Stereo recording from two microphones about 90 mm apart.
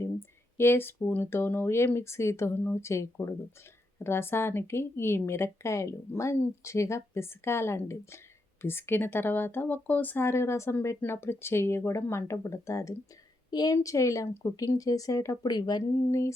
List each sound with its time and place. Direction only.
0.5 s speech: 25° left (ahead or behind)
13.5 s a woman's voice: 50° left (ahead or behind)
13.7 s speech: 35° left (ahead or behind)
15.4 s speech: 50° left (ahead or behind)